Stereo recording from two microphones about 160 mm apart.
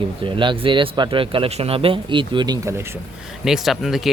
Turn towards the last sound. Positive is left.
turn(degrees=0)  # may be behind; listen again after turning